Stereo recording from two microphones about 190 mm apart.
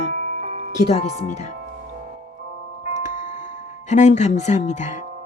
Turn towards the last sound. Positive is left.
turn(degrees=40)  # may be behind; listen again after turning